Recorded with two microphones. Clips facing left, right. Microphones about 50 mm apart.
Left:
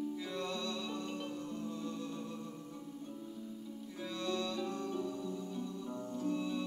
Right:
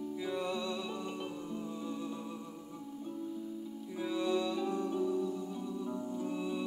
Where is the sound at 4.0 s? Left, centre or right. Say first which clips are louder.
Right 6 dB; centre.